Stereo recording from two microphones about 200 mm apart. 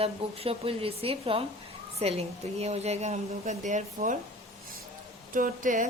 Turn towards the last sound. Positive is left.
turn(degrees=-40)  # may be behind; listen again after turning